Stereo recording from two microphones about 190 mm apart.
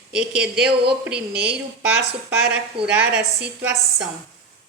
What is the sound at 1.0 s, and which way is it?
A woman's voice, 5° right (ahead or behind).